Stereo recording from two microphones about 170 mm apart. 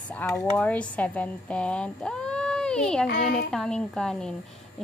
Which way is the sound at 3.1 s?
65° left (ahead or behind).